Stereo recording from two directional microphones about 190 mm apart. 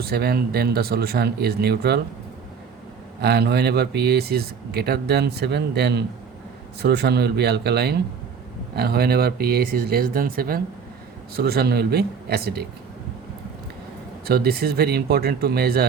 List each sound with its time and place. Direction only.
0.0 s speech: 55° right (ahead or behind)
3.2 s speech: 60° right (ahead or behind)
14.3 s speech: 55° right (ahead or behind)